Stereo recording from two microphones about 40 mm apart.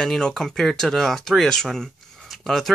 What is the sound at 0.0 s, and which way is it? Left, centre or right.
Speech, centre.